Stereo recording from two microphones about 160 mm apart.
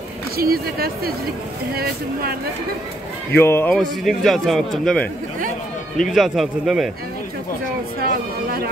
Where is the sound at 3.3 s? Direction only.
15° left (ahead or behind).